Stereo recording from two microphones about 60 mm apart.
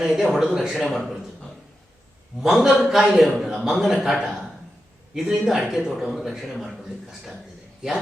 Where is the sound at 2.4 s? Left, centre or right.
Centre.